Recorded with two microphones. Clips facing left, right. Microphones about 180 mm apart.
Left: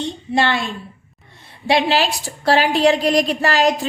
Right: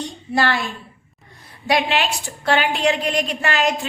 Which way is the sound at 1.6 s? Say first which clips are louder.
Left 3 dB; 30° left (ahead or behind).